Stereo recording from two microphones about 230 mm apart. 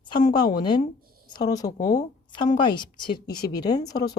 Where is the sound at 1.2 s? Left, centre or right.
Centre.